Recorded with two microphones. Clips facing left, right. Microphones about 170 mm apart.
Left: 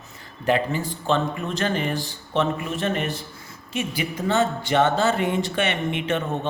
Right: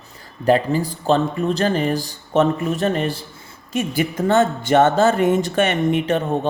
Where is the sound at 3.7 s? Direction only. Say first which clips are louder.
Right 6 dB; 45° right (ahead or behind).